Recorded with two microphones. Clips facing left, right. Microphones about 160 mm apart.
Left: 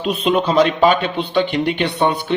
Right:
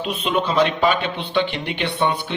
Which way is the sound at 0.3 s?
40° left (ahead or behind).